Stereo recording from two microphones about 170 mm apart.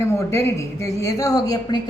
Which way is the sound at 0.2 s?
15° left (ahead or behind).